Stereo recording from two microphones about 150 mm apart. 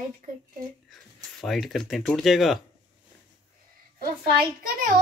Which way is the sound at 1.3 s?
Centre (ahead or behind).